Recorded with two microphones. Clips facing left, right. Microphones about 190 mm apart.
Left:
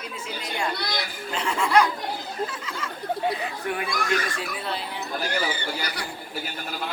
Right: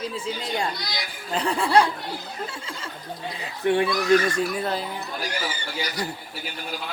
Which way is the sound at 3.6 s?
25° right (ahead or behind).